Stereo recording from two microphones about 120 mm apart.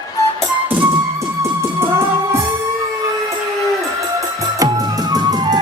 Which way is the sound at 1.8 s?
20° right (ahead or behind).